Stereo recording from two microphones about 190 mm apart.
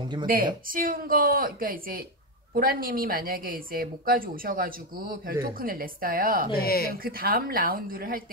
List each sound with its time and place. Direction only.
0.7 s a woman's voice: 45° right (ahead or behind)
6.5 s speech: 50° left (ahead or behind)
7.0 s a woman's voice: 50° right (ahead or behind)